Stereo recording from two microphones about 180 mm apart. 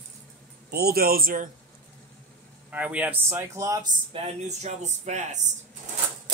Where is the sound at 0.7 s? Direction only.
60° right (ahead or behind).